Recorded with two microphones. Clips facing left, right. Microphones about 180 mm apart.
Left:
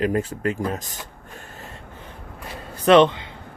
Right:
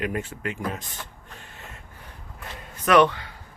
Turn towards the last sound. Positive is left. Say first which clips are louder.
# left 4 dB
turn(degrees=20)  # may be behind; listen again after turning